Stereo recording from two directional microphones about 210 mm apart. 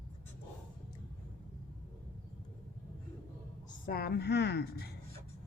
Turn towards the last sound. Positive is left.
turn(degrees=50)  # may be behind; listen again after turning